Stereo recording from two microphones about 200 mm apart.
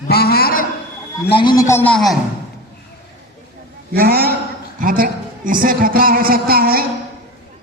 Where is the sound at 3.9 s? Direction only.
50° right (ahead or behind).